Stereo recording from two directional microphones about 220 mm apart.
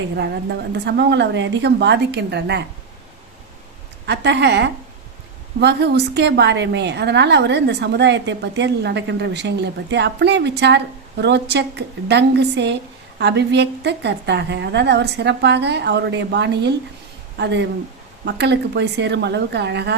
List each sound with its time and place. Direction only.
0.2 s a woman's voice: 50° right (ahead or behind)
4.0 s a woman's voice: 50° right (ahead or behind)